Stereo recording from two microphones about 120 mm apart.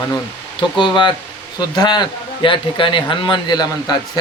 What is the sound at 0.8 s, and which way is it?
A man's voice, 40° left (ahead or behind).